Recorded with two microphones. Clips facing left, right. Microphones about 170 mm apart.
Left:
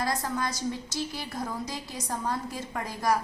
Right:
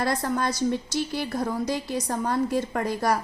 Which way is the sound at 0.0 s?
65° right (ahead or behind).